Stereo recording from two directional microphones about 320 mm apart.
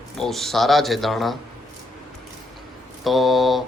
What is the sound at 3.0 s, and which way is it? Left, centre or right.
Speech, centre.